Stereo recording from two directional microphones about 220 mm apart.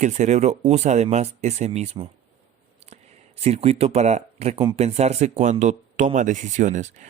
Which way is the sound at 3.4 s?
30° right (ahead or behind).